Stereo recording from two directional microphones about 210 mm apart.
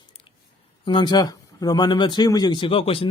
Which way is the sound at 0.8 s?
20° left (ahead or behind).